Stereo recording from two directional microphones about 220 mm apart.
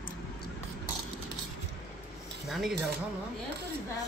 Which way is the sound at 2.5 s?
Centre (ahead or behind).